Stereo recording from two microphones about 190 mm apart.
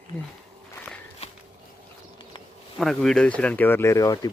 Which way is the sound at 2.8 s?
Centre (ahead or behind).